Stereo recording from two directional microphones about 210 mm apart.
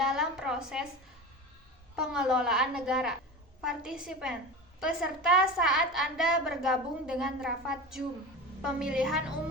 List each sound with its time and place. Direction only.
0.0 s a woman's voice: centre (ahead or behind)
2.0 s a woman's voice: 5° right (ahead or behind)